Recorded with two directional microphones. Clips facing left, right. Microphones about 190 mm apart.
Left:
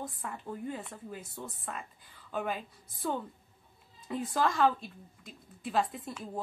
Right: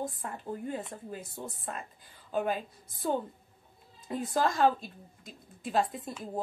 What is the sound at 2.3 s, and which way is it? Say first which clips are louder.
Speech: right 4 dB; 35° right (ahead or behind).